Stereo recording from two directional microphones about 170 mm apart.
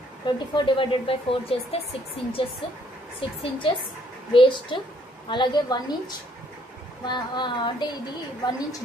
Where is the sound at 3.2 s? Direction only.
30° left (ahead or behind).